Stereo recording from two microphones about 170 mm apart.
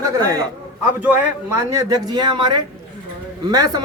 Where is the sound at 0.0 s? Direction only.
20° right (ahead or behind).